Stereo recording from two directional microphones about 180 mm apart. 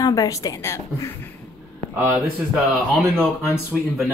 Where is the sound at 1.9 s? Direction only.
10° right (ahead or behind).